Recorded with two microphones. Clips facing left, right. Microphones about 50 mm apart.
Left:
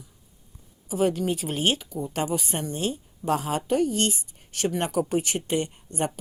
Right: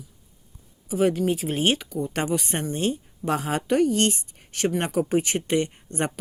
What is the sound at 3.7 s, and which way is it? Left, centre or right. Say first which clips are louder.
Speech: right 4 dB; right.